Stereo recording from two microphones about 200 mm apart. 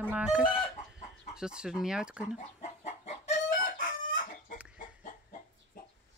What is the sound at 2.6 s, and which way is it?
Chicken, 35° left (ahead or behind).